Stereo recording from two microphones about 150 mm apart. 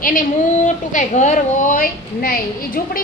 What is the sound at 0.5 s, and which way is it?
A child's voice, 55° left (ahead or behind).